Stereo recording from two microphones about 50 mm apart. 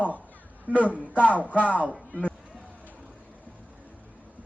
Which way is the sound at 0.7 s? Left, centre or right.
Right.